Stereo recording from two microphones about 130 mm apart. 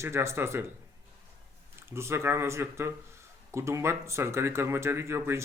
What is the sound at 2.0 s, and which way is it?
Speech, 20° right (ahead or behind).